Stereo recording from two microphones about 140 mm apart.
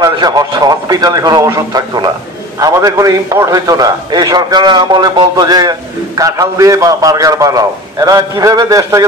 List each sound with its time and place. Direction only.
0.0 s a man's voice: 25° right (ahead or behind)